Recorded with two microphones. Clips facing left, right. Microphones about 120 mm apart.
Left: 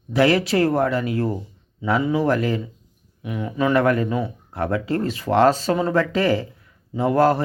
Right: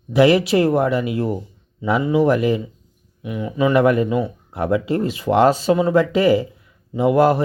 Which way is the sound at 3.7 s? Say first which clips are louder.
Right 3 dB; 15° right (ahead or behind).